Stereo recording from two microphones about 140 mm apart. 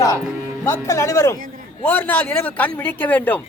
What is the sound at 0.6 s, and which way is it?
A man's voice, 20° left (ahead or behind).